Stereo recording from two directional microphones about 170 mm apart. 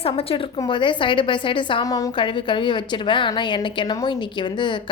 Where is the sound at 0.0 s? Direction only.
35° left (ahead or behind).